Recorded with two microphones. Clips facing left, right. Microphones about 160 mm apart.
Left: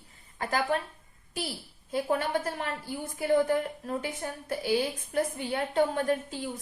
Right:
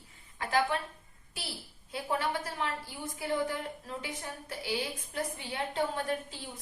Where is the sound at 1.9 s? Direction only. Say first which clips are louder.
Left 5 dB; 45° left (ahead or behind).